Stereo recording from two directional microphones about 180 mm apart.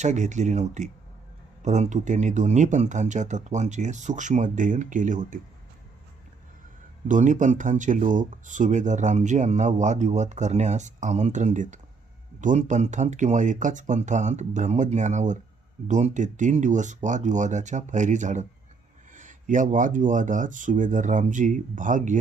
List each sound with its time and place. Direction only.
0.0 s speech: 40° right (ahead or behind)
7.1 s speech: 45° right (ahead or behind)